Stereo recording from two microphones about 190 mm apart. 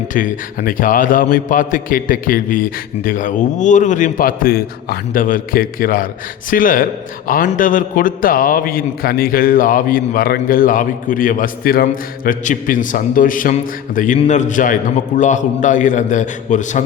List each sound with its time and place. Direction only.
0.1 s a man's voice: 45° left (ahead or behind)